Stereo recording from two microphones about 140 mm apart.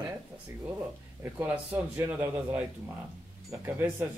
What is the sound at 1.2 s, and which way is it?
Speech, 15° right (ahead or behind).